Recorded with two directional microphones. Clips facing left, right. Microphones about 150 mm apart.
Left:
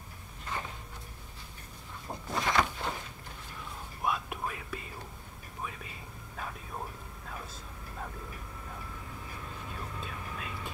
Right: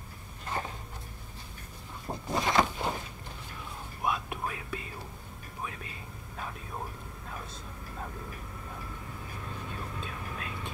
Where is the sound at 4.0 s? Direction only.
Centre (ahead or behind).